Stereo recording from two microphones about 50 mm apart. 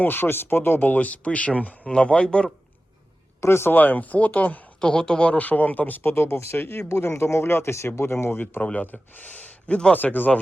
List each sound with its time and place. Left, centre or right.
0.0 s speech: left
3.4 s speech: left
3.8 s speech: left
4.8 s speech: centre
5.4 s speech: left
6.1 s speech: left
6.8 s speech: left
8.6 s speech: left
9.9 s speech: left